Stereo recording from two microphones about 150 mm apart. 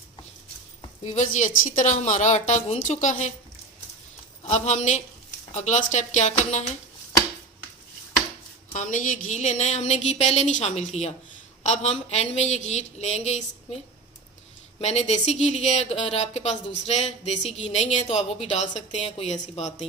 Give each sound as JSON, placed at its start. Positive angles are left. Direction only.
{"t": 1.0, "sound": "speech", "side_deg": 55}
{"t": 4.4, "sound": "speech", "side_deg": 50}
{"t": 8.7, "sound": "speech", "side_deg": 55}
{"t": 14.8, "sound": "speech", "side_deg": 45}